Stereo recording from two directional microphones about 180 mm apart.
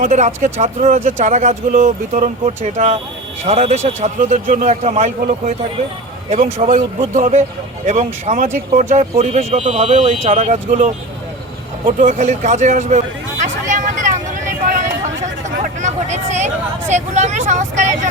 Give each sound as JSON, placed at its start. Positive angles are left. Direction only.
{"t": 0.0, "sound": "speech", "side_deg": -40}
{"t": 11.9, "sound": "speech", "side_deg": -45}
{"t": 13.4, "sound": "vehicle", "side_deg": -45}
{"t": 15.6, "sound": "hubbub", "side_deg": -40}
{"t": 16.9, "sound": "speech", "side_deg": -40}